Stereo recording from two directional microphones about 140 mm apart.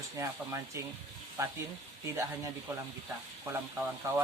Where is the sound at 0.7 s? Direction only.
20° right (ahead or behind).